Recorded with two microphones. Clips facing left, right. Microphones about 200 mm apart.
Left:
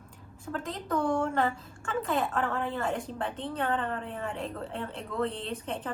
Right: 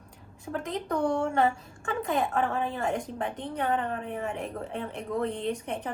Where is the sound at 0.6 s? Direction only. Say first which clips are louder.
Right 2 dB; 20° right (ahead or behind).